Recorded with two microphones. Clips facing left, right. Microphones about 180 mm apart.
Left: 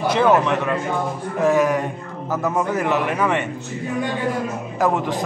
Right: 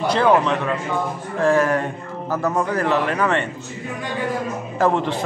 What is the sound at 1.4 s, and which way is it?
Speech, 20° left (ahead or behind).